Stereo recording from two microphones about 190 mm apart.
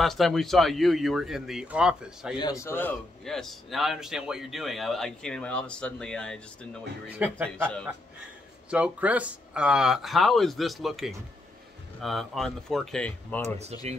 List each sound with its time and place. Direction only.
0.0 s a man's voice: centre (ahead or behind)
2.3 s a man's voice: 20° left (ahead or behind)
7.1 s a man's voice: 10° right (ahead or behind)
8.6 s a man's voice: 5° right (ahead or behind)